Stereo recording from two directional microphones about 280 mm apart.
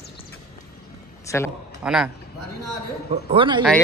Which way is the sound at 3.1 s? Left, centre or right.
Centre.